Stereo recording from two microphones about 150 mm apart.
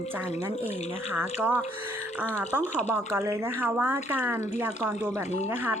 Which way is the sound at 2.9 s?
20° right (ahead or behind).